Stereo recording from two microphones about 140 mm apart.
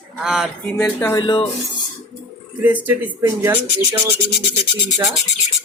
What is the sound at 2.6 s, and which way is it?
Speech, 15° right (ahead or behind).